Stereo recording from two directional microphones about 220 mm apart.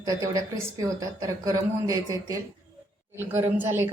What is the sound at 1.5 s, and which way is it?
A woman's voice, 15° right (ahead or behind).